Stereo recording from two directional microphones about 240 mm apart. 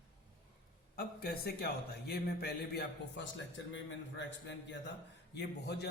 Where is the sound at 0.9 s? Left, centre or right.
Left.